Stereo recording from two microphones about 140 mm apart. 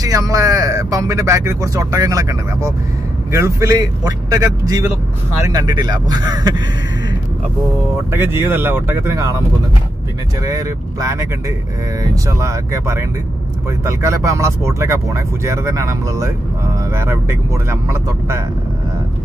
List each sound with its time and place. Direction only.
0.0 s speech: 25° right (ahead or behind)
8.1 s speech: 15° right (ahead or behind)
10.4 s speech: 25° right (ahead or behind)